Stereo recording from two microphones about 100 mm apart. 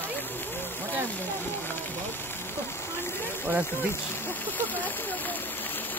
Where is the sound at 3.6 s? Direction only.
25° left (ahead or behind).